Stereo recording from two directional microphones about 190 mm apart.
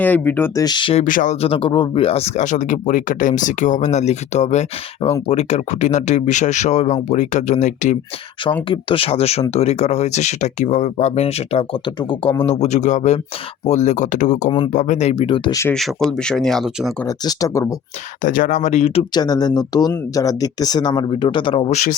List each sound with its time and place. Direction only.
0.0 s speech: 10° left (ahead or behind); by 1.0 s 25° left (ahead or behind)
1.0 s speech: 45° left (ahead or behind)
8.7 s speech: 30° left (ahead or behind)
12.5 s speech: 35° left (ahead or behind)
15.7 s speech: centre (ahead or behind)
17.1 s speech: 15° left (ahead or behind)
18.2 s speech: 45° left (ahead or behind)
19.1 s speech: 20° left (ahead or behind)